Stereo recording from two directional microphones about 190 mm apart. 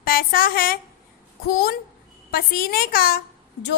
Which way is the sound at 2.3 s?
50° left (ahead or behind).